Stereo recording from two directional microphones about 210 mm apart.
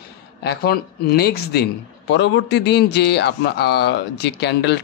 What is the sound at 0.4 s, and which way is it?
Speech, 50° left (ahead or behind).